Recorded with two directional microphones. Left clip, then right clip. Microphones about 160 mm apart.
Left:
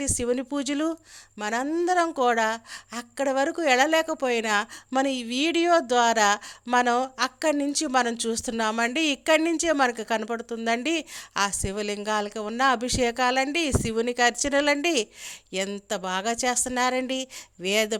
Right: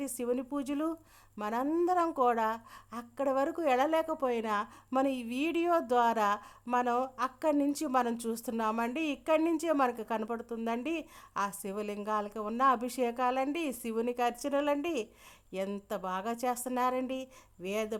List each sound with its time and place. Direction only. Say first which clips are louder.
0.0 s a woman's voice: left 7 dB; 15° left (ahead or behind)